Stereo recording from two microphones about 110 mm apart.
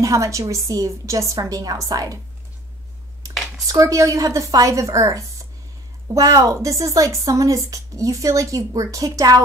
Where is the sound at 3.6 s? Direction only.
30° right (ahead or behind).